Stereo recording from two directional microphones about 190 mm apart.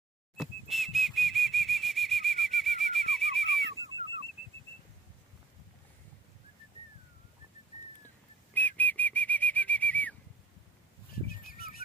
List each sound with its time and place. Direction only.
0.4 s whistle: centre (ahead or behind)
8.5 s whistling: 10° left (ahead or behind)
11.2 s bird: 50° left (ahead or behind)